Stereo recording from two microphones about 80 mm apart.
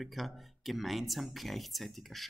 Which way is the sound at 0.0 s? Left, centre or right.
Centre.